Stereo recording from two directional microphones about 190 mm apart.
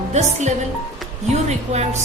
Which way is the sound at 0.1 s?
35° right (ahead or behind).